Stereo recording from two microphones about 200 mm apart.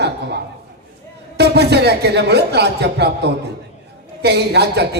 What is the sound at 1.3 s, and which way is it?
A man's voice, 55° right (ahead or behind).